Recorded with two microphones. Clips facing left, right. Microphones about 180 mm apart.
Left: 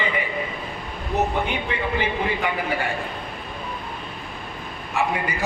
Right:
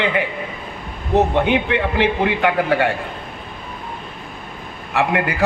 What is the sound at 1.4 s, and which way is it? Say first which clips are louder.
A man's voice: right 8 dB; 80° right.